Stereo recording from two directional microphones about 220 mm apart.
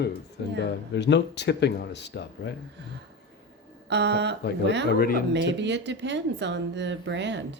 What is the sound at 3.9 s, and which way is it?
Speech, 50° right (ahead or behind).